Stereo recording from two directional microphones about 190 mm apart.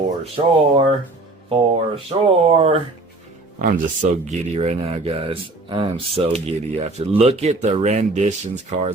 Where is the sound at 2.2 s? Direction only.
30° right (ahead or behind).